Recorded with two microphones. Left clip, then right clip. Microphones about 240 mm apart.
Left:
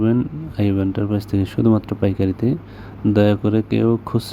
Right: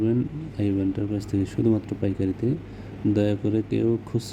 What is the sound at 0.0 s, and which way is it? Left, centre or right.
Speech, left.